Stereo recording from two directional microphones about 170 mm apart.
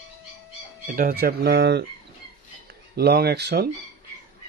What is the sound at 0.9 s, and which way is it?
Speech, 60° right (ahead or behind).